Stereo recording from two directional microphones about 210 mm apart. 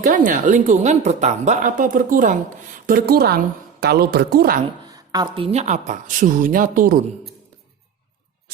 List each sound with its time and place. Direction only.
0.3 s speech: 35° right (ahead or behind)
4.9 s speech: 20° right (ahead or behind); by 7.0 s 40° right (ahead or behind)